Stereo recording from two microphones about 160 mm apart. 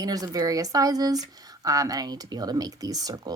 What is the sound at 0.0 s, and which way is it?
Speech, 25° right (ahead or behind).